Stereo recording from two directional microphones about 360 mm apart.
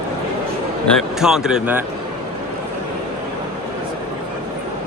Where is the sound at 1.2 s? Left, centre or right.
Centre.